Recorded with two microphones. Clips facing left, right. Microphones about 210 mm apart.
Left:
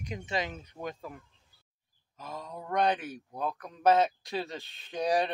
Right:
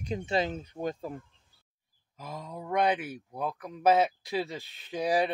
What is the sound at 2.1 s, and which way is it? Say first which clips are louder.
Speech: right 1 dB; 10° right (ahead or behind).